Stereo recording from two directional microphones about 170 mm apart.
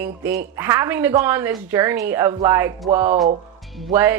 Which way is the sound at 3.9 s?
15° right (ahead or behind).